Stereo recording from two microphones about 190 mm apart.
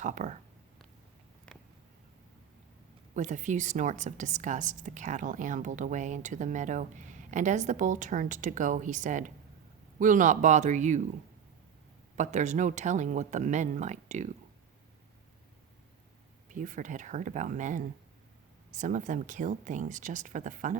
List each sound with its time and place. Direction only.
0.0 s a woman's voice: 40° right (ahead or behind)
1.5 s a sound: 5° left (ahead or behind)
3.2 s a woman's voice: 40° right (ahead or behind)
12.1 s a woman's voice: 40° right (ahead or behind)
16.5 s a woman's voice: 45° right (ahead or behind)